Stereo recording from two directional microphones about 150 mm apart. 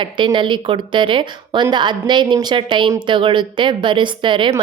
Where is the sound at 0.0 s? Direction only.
35° right (ahead or behind).